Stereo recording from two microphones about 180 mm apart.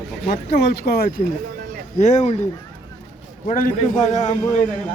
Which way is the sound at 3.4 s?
45° left (ahead or behind).